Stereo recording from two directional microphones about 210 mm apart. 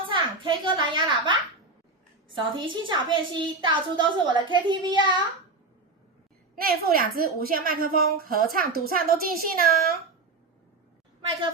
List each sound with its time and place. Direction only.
0.0 s a woman's voice: 25° right (ahead or behind)
6.6 s a woman's voice: 45° right (ahead or behind)